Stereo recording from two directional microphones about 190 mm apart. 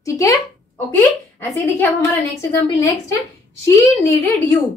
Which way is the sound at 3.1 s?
15° left (ahead or behind).